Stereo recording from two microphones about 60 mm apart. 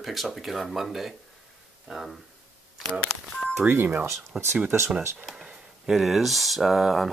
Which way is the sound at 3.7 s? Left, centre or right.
Right.